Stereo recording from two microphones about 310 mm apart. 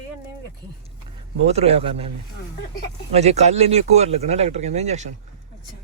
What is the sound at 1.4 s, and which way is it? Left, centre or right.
Speech, centre.